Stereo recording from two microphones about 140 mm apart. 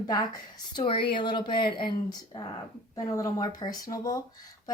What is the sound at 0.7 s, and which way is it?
Speech, 35° left (ahead or behind).